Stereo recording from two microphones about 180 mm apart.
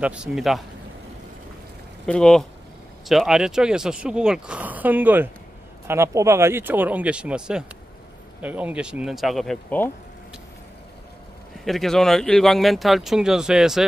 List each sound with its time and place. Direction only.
0.0 s speech: 5° right (ahead or behind)
2.0 s speech: 5° left (ahead or behind)
11.6 s speech: centre (ahead or behind)